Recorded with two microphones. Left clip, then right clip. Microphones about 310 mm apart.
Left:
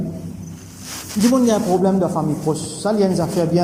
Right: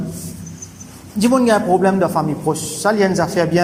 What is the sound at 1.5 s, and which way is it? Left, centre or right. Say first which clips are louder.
Speech: right 3 dB; right.